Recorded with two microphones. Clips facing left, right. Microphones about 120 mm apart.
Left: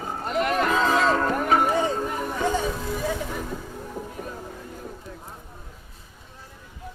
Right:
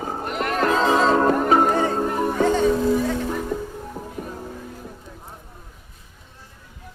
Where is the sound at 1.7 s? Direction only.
50° right (ahead or behind).